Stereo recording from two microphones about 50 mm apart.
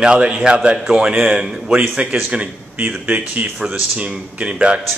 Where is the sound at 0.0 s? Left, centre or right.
Centre.